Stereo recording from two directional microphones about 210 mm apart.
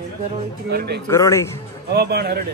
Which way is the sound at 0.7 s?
50° right (ahead or behind).